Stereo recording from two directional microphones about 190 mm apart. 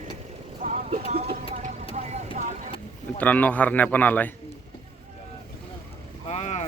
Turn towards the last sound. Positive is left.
turn(degrees=35)  # may be behind; listen again after turning